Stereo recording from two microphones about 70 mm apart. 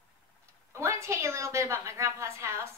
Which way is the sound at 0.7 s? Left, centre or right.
Right.